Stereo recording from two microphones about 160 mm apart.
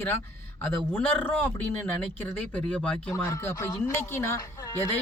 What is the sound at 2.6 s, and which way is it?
Speech, 10° left (ahead or behind).